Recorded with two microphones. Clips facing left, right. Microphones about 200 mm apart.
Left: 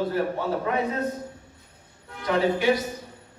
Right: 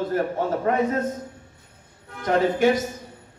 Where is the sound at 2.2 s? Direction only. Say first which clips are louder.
Right 3 dB; 45° right (ahead or behind).